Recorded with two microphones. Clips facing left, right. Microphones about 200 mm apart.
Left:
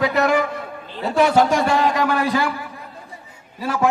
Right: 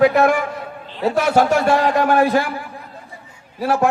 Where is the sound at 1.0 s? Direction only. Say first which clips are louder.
Even; 45° right (ahead or behind).